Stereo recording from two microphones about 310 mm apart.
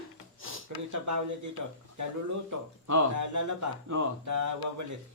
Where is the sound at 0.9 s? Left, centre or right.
Right.